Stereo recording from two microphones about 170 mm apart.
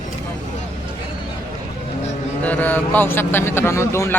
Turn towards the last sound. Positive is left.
turn(degrees=15)  # may be behind; listen again after turning